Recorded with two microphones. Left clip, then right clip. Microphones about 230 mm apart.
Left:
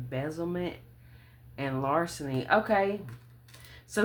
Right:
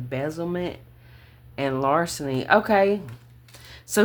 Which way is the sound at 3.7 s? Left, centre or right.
Right.